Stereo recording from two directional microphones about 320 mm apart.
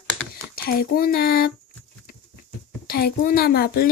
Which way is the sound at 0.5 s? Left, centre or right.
Left.